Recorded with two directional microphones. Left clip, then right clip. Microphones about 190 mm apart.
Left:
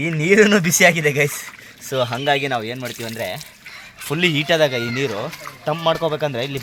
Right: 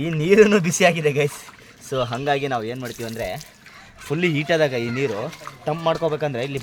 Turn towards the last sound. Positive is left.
turn(degrees=15)  # may be behind; listen again after turning